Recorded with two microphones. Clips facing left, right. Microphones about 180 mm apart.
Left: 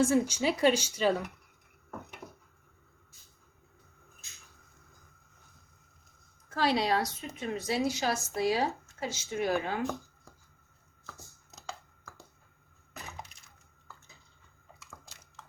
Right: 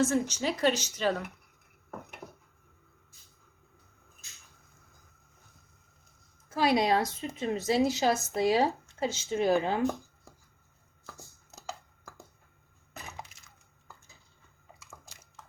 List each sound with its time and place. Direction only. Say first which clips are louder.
0.0 s speech: left 2 dB; 10° left (ahead or behind)
6.5 s a woman's voice: right 3 dB; 10° right (ahead or behind)
14.8 s a sound: left 1 dB; 10° right (ahead or behind)